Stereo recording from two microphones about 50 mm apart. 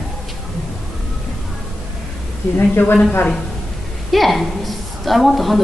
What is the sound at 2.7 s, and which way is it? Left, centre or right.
Speech, left.